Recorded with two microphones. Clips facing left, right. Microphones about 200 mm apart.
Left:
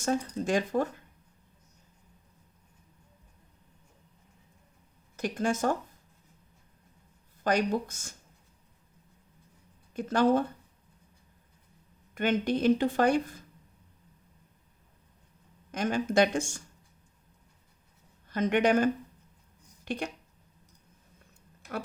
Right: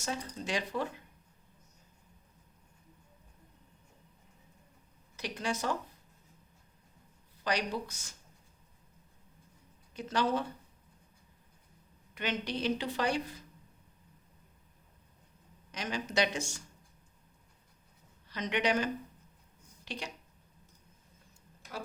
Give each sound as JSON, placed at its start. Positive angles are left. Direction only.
{"t": 0.0, "sound": "speech", "side_deg": 50}
{"t": 5.1, "sound": "speech", "side_deg": 50}
{"t": 7.4, "sound": "speech", "side_deg": 50}
{"t": 9.9, "sound": "speech", "side_deg": 50}
{"t": 12.1, "sound": "speech", "side_deg": 50}
{"t": 15.7, "sound": "speech", "side_deg": 50}
{"t": 18.3, "sound": "a woman's voice", "side_deg": 50}
{"t": 19.8, "sound": "a sound", "side_deg": 55}